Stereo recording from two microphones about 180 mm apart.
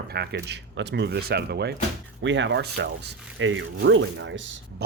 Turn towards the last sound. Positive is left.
turn(degrees=-90)